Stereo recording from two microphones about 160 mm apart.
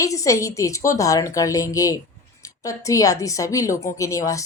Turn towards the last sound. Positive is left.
turn(degrees=20)  # may be behind; listen again after turning